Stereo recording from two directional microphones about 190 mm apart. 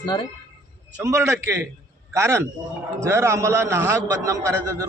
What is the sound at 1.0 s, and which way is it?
A man's voice, 15° right (ahead or behind).